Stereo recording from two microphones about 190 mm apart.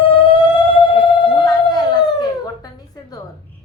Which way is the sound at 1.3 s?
25° left (ahead or behind).